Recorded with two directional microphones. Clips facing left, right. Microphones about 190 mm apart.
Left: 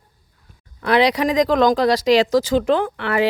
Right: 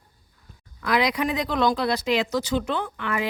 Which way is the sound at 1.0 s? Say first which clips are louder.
Left 8 dB; 90° left.